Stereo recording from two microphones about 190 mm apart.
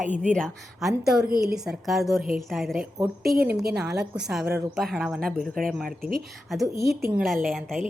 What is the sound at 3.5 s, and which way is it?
Speech, 55° right (ahead or behind).